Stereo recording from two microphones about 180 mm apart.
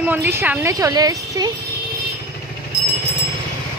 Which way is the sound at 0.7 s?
20° right (ahead or behind).